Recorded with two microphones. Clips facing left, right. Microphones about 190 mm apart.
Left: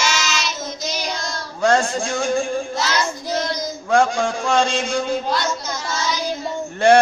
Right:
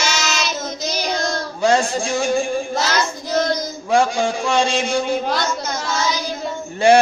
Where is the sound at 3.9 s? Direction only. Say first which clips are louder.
Even; 10° right (ahead or behind).